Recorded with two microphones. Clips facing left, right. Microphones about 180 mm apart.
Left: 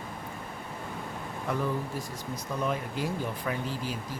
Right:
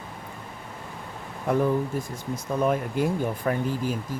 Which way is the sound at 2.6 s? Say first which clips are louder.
Right 7 dB; 55° right (ahead or behind).